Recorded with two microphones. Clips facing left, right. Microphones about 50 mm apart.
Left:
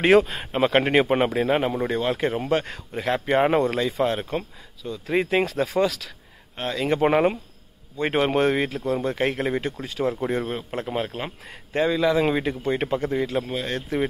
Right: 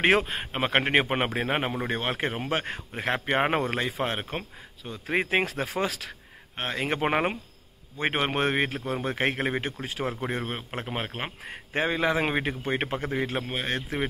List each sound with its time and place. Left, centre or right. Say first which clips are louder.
0.1 s a man's voice: left 6 dB; centre; by 7.1 s right
8.1 s a man's voice: left 6 dB; centre; by 13.7 s right
13.7 s speech: left 3 dB; centre